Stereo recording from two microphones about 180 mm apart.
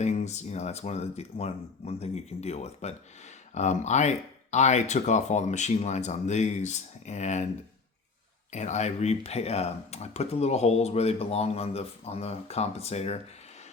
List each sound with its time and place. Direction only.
0.0 s speech: 40° left (ahead or behind)
8.5 s speech: 40° left (ahead or behind)